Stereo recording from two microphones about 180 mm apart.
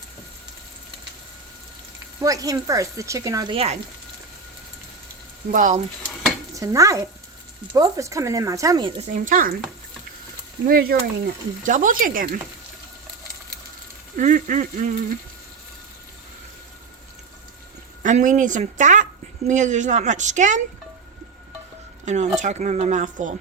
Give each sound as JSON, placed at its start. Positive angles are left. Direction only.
{"t": 2.2, "sound": "speech", "side_deg": -20}
{"t": 5.5, "sound": "a woman's voice", "side_deg": -45}
{"t": 6.5, "sound": "stir", "side_deg": -20}
{"t": 7.7, "sound": "speech", "side_deg": -20}
{"t": 9.0, "sound": "a woman's voice", "side_deg": -40}
{"t": 10.7, "sound": "a woman's voice", "side_deg": -55}
{"t": 14.2, "sound": "a woman's voice", "side_deg": -45}
{"t": 18.0, "sound": "a woman's voice", "side_deg": -45}
{"t": 22.0, "sound": "speech", "side_deg": -40}